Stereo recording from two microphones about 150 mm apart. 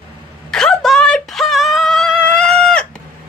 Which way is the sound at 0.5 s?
5° left (ahead or behind).